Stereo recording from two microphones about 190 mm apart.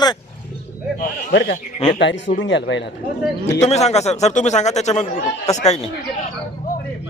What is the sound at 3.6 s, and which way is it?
A man's voice, 35° left (ahead or behind).